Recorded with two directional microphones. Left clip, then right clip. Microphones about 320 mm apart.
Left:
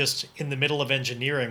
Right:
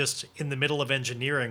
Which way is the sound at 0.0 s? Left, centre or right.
Right.